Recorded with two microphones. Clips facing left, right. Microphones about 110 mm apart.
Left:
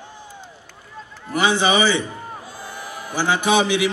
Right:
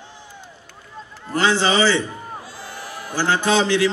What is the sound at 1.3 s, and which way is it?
A man's voice, 15° left (ahead or behind).